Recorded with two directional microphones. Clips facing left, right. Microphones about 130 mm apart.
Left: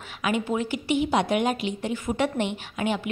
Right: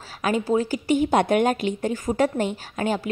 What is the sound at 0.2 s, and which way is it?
Speech, 40° right (ahead or behind).